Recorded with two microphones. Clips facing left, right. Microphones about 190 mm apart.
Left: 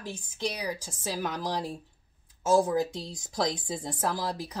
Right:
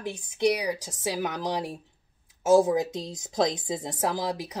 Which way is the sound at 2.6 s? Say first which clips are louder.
Right 2 dB; 20° right (ahead or behind).